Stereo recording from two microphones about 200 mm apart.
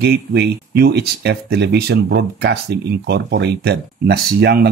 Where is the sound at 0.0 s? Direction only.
55° right (ahead or behind).